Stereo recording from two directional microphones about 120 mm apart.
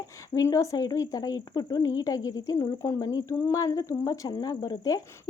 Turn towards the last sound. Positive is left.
turn(degrees=30)  # may be behind; listen again after turning